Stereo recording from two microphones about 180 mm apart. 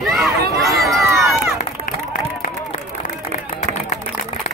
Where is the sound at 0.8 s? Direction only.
Centre (ahead or behind).